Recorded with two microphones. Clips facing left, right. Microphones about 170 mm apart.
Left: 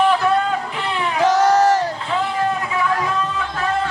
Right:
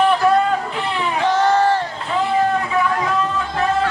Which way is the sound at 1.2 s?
40° left (ahead or behind).